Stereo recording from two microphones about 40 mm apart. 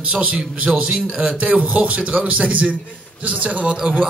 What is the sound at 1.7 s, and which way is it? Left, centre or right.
Speech, right.